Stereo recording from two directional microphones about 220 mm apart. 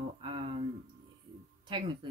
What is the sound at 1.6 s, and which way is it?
Speech, 20° right (ahead or behind).